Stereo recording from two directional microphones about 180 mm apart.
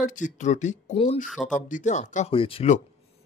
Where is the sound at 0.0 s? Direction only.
45° left (ahead or behind).